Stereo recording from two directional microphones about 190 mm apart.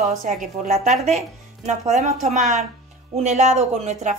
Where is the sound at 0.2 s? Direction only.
40° right (ahead or behind).